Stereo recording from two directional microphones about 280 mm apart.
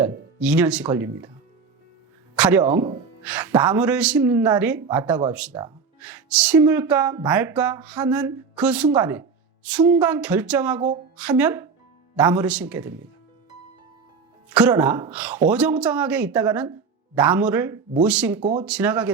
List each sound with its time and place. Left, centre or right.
0.0 s speech: centre
2.3 s speech: centre
2.6 s speech: right
3.2 s speech: centre
14.5 s speech: centre